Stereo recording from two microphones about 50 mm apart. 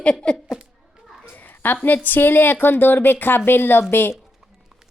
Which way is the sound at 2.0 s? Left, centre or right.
Left.